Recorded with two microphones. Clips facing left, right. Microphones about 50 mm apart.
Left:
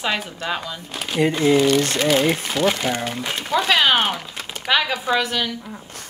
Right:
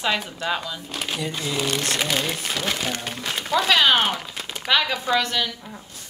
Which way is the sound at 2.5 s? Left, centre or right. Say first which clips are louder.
Left 6 dB; centre.